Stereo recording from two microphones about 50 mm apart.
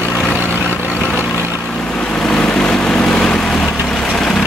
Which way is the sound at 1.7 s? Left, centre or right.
Centre.